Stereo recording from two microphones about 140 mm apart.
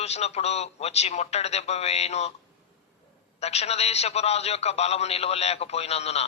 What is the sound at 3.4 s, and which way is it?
A man's voice, 50° left (ahead or behind).